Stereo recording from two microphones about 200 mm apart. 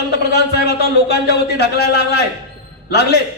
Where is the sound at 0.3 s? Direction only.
55° left (ahead or behind).